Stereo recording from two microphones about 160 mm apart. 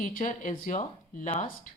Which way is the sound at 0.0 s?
55° left (ahead or behind).